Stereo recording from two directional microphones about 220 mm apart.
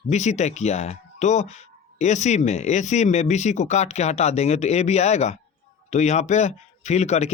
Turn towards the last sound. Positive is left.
turn(degrees=30)  # may be behind; listen again after turning